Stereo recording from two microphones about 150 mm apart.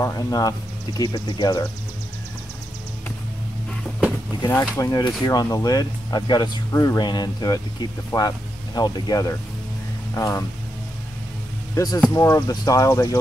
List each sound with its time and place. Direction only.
0.0 s speech: 25° left (ahead or behind)
4.7 s speech: 25° left (ahead or behind)
11.7 s speech: 25° left (ahead or behind)